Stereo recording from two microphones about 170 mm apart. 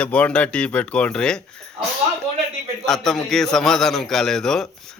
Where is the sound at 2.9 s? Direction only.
Centre (ahead or behind).